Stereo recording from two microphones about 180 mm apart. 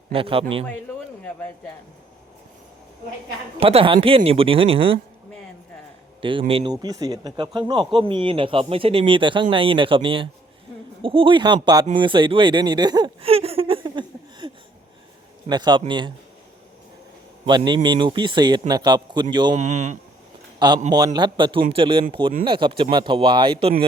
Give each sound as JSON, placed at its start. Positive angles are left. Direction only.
{"t": 0.1, "sound": "speech", "side_deg": -30}
{"t": 3.6, "sound": "speech", "side_deg": -30}
{"t": 6.5, "sound": "speech", "side_deg": -25}
{"t": 11.9, "sound": "a sound", "side_deg": -25}
{"t": 15.4, "sound": "speech", "side_deg": -25}
{"t": 17.4, "sound": "a man's voice", "side_deg": -25}
{"t": 19.5, "sound": "speech", "side_deg": -40}
{"t": 20.6, "sound": "a man's voice", "side_deg": -25}